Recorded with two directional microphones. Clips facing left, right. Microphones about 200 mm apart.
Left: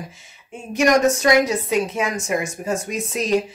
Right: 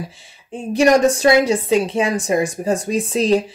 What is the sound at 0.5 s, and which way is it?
Speech, 30° right (ahead or behind).